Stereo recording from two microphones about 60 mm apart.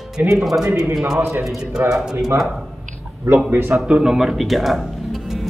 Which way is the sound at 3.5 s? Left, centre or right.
Right.